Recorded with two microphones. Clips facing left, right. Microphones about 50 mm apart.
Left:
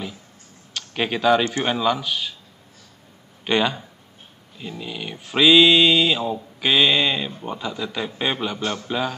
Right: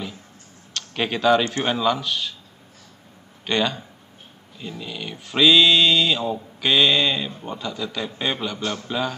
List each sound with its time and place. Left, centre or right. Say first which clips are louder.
0.7 s speech: left 1 dB; centre
3.4 s speech: left 2 dB; centre